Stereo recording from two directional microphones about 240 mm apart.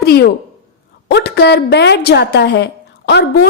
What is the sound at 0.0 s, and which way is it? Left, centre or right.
A woman's voice, left.